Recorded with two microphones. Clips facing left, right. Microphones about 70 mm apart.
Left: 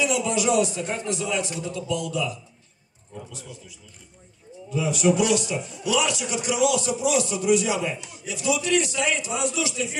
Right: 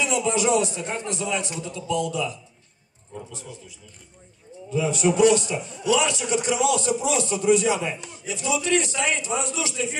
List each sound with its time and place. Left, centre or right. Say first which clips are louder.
0.0 s a man's voice: even; right
4.7 s a man's voice: right 1 dB; right